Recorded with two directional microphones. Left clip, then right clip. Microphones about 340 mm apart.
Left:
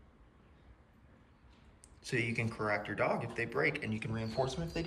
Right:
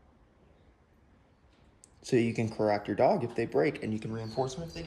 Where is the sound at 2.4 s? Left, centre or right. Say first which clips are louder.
Right 6 dB; centre.